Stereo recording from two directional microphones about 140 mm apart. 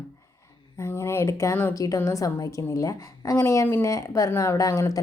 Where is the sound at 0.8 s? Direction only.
20° left (ahead or behind).